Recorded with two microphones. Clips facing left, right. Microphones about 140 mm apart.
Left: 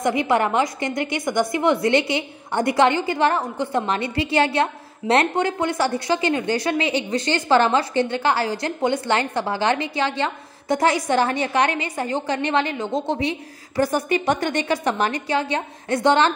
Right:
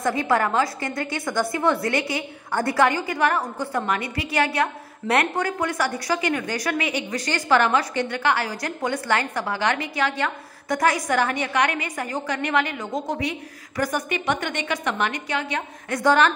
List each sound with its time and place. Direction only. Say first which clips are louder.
0.0 s a woman's voice: left 2 dB; 20° left (ahead or behind)